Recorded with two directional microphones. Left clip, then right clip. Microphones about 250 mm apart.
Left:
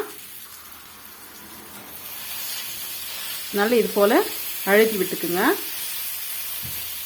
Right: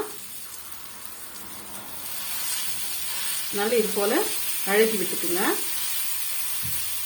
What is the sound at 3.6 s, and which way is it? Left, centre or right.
Speech, left.